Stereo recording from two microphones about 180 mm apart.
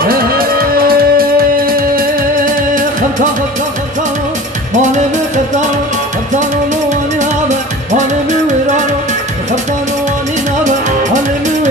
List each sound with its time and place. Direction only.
0.0 s music: 55° right (ahead or behind)
4.7 s music: 40° right (ahead or behind)
6.9 s music: 40° right (ahead or behind)